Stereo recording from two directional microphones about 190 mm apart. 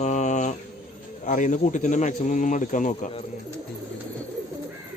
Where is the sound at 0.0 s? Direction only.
40° left (ahead or behind).